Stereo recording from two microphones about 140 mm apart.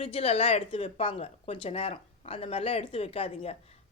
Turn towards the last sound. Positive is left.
turn(degrees=45)  # may be behind; listen again after turning